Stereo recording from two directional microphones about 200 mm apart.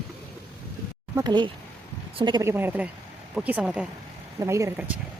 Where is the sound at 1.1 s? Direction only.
20° right (ahead or behind).